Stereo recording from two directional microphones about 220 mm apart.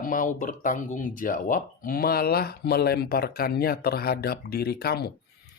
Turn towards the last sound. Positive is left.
turn(degrees=45)  # may be behind; listen again after turning